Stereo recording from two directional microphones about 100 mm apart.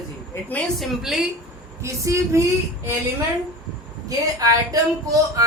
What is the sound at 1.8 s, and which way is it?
Speech, 30° right (ahead or behind).